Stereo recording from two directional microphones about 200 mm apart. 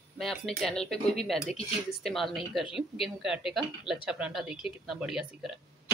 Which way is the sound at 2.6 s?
25° left (ahead or behind).